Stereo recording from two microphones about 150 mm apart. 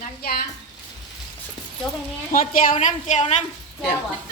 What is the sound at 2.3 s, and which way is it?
Speech, 65° left (ahead or behind).